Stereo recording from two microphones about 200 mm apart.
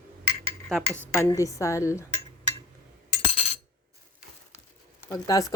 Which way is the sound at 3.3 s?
35° left (ahead or behind).